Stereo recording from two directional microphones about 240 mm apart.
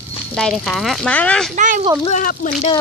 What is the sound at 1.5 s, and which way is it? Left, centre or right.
Speech, right.